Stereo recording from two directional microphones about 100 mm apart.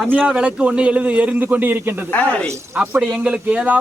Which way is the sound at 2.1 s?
15° left (ahead or behind).